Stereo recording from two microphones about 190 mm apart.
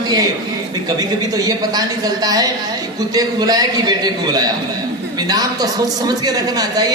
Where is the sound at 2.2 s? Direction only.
20° right (ahead or behind).